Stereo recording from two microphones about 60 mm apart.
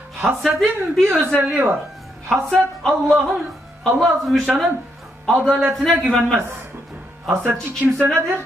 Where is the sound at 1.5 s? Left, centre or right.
Right.